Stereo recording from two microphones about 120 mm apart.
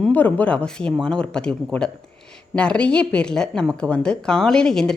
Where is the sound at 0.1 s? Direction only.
15° left (ahead or behind).